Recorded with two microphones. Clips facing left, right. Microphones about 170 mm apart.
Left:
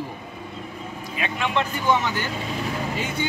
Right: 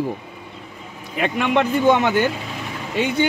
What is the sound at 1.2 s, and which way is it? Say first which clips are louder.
Speech: right 6 dB; 60° right (ahead or behind).